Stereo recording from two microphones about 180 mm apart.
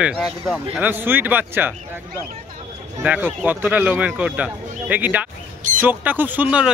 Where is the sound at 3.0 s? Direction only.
10° right (ahead or behind).